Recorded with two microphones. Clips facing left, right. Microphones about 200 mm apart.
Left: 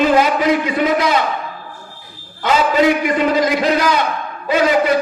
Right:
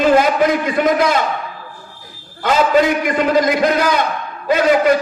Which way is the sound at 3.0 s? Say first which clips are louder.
Even; 50° right (ahead or behind).